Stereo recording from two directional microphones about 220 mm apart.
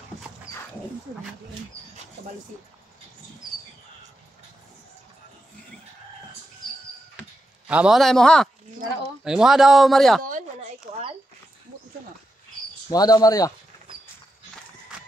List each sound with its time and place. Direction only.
7.6 s a man's voice: 5° right (ahead or behind)
12.9 s speech: 15° left (ahead or behind)